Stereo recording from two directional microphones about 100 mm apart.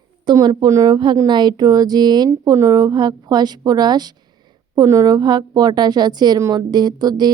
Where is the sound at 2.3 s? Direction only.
30° right (ahead or behind).